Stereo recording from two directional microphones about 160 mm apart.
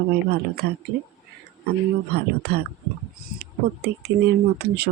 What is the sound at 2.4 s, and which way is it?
Speech, 90° right.